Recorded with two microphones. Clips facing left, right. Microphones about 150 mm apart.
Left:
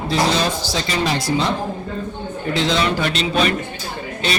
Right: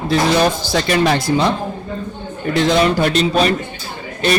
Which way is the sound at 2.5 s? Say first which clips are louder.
Right 5 dB; 50° right (ahead or behind).